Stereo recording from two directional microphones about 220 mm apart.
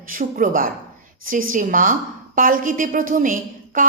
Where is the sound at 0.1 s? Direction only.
40° right (ahead or behind).